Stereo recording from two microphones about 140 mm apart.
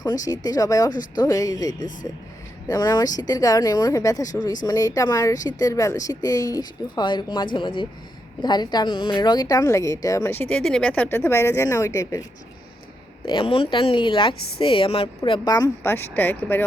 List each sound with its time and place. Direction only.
0.0 s speech: 25° left (ahead or behind)
10.6 s speech: 5° left (ahead or behind); by 12.2 s 25° left (ahead or behind)
13.2 s a woman's voice: 40° left (ahead or behind); by 16.6 s 15° left (ahead or behind)